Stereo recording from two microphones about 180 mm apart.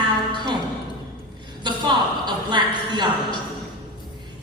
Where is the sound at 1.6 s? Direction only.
25° right (ahead or behind).